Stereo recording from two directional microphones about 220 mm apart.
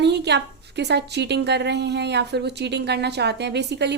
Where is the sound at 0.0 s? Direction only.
50° right (ahead or behind).